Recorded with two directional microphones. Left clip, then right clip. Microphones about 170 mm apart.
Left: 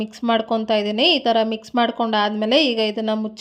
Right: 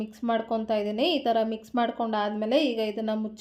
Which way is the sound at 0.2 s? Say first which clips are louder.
Left 7 dB; 20° left (ahead or behind).